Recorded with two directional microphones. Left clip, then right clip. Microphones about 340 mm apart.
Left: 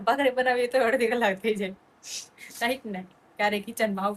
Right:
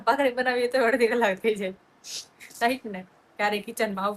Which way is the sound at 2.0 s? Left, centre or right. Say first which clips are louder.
Even; centre.